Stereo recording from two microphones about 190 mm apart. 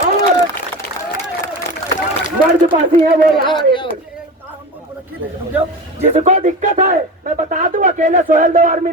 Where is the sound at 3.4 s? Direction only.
25° left (ahead or behind).